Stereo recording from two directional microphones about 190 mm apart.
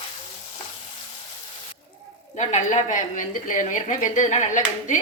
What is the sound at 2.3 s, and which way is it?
A woman's voice, 40° left (ahead or behind).